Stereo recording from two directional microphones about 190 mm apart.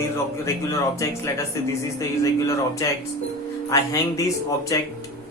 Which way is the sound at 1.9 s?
15° left (ahead or behind).